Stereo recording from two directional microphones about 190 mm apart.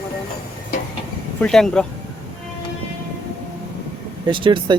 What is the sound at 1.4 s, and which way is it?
Speech, 5° left (ahead or behind).